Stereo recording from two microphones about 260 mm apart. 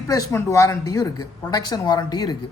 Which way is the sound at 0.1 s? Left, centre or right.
Centre.